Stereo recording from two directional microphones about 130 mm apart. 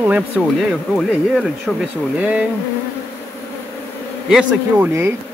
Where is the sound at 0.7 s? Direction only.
Centre (ahead or behind).